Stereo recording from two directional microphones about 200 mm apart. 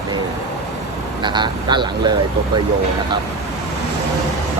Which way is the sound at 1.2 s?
20° right (ahead or behind).